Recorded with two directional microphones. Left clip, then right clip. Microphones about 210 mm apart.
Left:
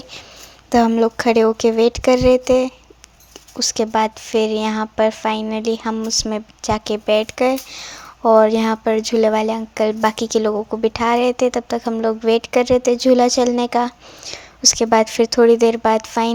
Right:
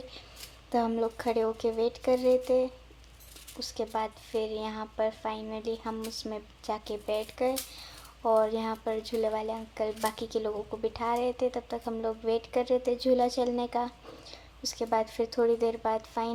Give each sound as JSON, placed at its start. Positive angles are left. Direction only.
{"t": 0.7, "sound": "speech", "side_deg": 30}